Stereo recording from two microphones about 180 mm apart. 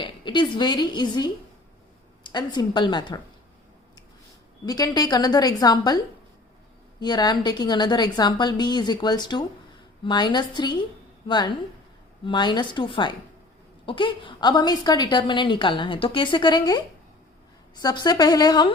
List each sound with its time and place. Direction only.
0.0 s a woman's voice: 25° left (ahead or behind)
4.6 s a woman's voice: 20° left (ahead or behind)
7.0 s a woman's voice: 25° left (ahead or behind)